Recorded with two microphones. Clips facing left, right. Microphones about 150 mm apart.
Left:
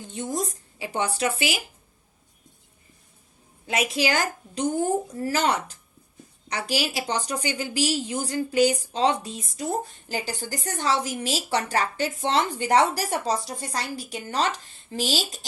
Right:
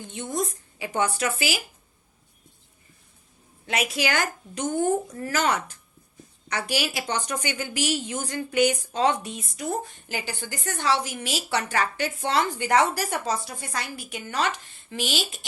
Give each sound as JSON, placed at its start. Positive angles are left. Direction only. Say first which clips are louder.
{"t": 0.1, "sound": "speech", "louder": "even", "side_deg": 40}
{"t": 3.9, "sound": "speech", "louder": "left 2 dB", "side_deg": 40}